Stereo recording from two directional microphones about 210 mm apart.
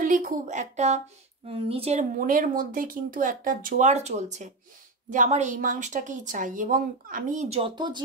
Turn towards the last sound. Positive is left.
turn(degrees=-20)  # may be behind; listen again after turning